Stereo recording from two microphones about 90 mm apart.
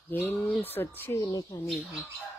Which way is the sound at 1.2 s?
45° left (ahead or behind).